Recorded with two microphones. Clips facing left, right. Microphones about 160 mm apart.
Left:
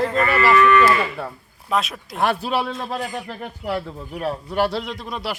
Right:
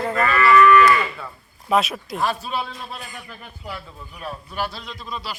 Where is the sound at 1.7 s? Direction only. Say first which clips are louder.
Right 3 dB; centre (ahead or behind).